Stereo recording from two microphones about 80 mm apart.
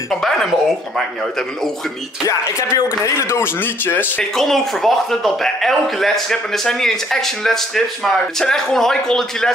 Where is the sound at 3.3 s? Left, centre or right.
Left.